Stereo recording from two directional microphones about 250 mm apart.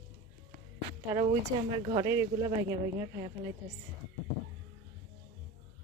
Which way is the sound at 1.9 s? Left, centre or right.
Centre.